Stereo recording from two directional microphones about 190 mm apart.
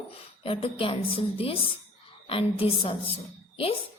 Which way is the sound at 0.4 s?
30° left (ahead or behind).